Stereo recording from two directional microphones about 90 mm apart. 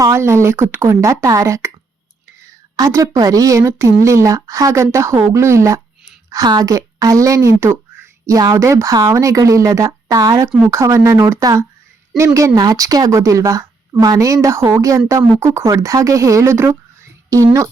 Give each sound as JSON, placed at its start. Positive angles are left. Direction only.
{"t": 0.1, "sound": "speech", "side_deg": -30}
{"t": 1.0, "sound": "speech", "side_deg": -35}
{"t": 2.7, "sound": "speech", "side_deg": -40}
{"t": 6.3, "sound": "speech", "side_deg": -45}
{"t": 10.7, "sound": "speech", "side_deg": -35}